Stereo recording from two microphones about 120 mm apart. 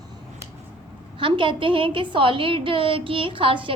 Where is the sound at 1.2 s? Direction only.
45° right (ahead or behind).